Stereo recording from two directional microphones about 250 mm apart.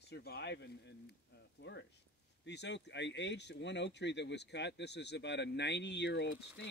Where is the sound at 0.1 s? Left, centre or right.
Left.